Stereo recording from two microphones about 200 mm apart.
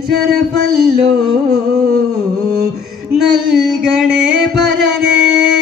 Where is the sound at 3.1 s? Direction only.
Centre (ahead or behind).